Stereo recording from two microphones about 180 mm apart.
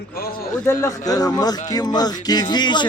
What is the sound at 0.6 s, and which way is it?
Speech, 15° left (ahead or behind).